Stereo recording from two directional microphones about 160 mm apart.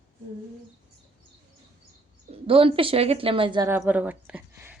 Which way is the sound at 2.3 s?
35° right (ahead or behind).